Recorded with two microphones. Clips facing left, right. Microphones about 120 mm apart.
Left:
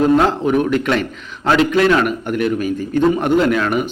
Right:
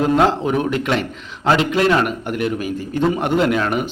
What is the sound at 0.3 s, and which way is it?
A man's voice, 25° right (ahead or behind).